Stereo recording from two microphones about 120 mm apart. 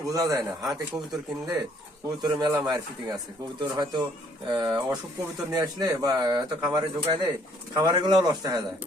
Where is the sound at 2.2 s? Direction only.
35° right (ahead or behind).